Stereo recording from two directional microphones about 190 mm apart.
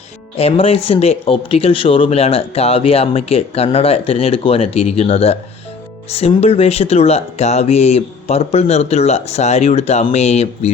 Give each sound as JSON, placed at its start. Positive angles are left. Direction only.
{"t": 0.3, "sound": "speech", "side_deg": 30}